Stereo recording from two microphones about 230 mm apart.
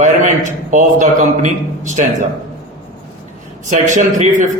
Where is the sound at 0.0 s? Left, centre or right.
Right.